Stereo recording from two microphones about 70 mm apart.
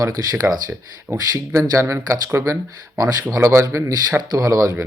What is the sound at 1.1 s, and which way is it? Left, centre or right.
Speech, right.